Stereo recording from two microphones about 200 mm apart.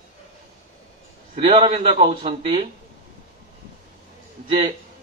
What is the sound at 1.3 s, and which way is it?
Speech, 40° right (ahead or behind).